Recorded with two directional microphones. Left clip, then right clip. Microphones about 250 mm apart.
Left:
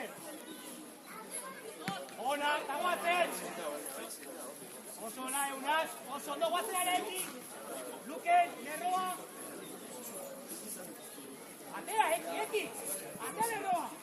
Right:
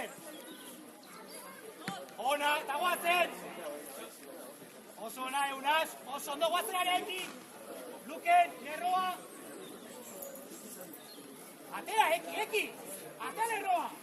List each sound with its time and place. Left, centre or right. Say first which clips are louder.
2.2 s a sound: right 2 dB; right
5.2 s speech: right 4 dB; right
8.2 s speech: right 2 dB; right
11.7 s a woman's voice: right 2 dB; right